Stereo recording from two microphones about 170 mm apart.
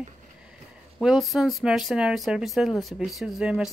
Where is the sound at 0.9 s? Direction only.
Centre (ahead or behind).